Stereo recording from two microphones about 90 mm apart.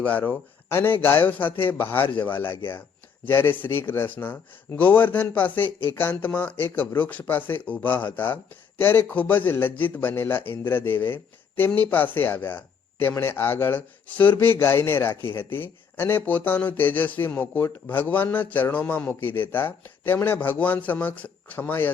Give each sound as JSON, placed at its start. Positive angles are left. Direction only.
{"t": 0.0, "sound": "a man's voice", "side_deg": 20}
{"t": 3.2, "sound": "a man's voice", "side_deg": 25}